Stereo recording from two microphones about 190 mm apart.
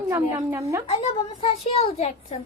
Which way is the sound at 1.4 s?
30° left (ahead or behind).